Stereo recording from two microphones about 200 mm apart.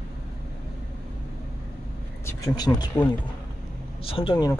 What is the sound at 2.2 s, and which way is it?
Speech, 20° left (ahead or behind).